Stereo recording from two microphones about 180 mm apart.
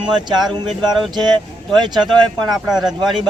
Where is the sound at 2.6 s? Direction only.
5° right (ahead or behind).